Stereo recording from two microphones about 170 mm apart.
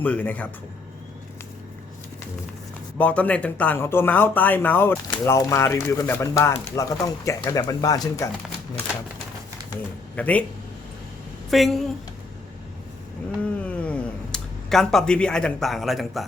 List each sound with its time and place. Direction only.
0.0 s speech: 10° left (ahead or behind)
3.0 s speech: 10° left (ahead or behind)
10.2 s speech: 10° left (ahead or behind)
11.5 s a woman's voice: centre (ahead or behind)
13.4 s cat: 5° left (ahead or behind)